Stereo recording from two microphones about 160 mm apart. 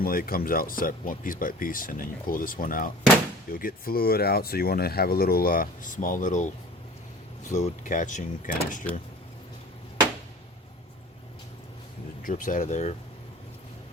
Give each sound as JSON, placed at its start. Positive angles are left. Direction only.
{"t": 0.0, "sound": "speech", "side_deg": 65}
{"t": 12.2, "sound": "speech", "side_deg": 55}